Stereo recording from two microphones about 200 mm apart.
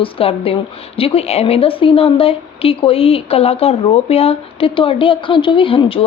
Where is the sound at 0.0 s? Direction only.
30° left (ahead or behind).